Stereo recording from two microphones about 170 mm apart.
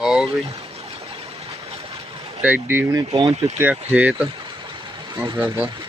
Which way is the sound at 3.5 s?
10° right (ahead or behind).